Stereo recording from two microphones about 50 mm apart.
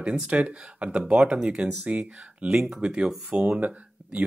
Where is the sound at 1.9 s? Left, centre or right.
Right.